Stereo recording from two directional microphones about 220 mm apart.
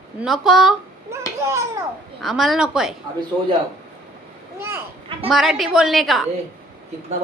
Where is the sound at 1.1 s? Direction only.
15° right (ahead or behind).